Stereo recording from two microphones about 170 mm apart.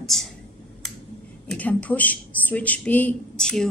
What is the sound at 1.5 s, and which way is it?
A woman's voice, 10° left (ahead or behind).